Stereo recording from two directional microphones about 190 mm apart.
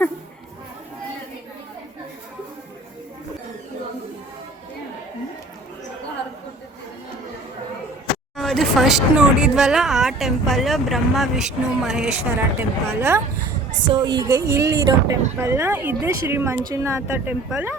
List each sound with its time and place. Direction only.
8.4 s speech: centre (ahead or behind)